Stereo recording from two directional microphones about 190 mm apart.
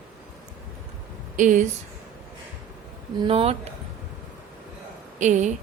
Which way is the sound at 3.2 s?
30° right (ahead or behind).